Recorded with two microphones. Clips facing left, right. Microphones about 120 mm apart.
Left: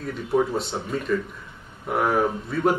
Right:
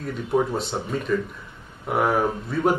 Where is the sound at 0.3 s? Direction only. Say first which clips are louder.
Even; 5° right (ahead or behind).